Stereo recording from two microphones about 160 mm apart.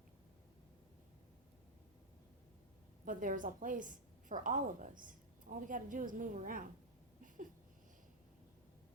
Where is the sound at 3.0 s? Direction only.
55° right (ahead or behind).